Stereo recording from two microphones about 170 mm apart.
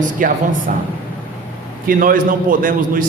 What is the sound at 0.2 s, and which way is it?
Speech, 50° right (ahead or behind).